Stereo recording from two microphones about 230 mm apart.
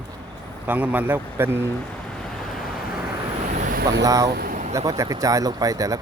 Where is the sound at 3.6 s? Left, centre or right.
Right.